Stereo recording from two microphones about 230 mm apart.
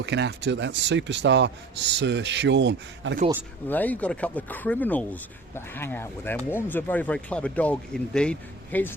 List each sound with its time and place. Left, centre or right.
0.0 s speech: right
3.7 s speech: centre